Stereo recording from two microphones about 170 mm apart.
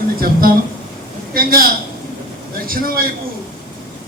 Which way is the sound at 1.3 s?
60° right (ahead or behind).